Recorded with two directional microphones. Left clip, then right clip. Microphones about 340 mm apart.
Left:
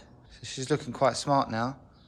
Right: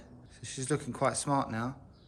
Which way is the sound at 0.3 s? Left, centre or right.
Centre.